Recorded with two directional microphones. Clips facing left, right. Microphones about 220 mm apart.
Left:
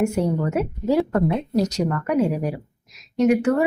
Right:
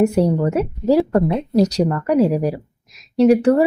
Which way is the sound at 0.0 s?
35° right (ahead or behind).